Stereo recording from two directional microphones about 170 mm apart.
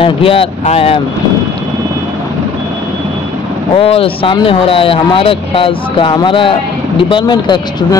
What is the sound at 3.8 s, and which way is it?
Speech, 35° left (ahead or behind).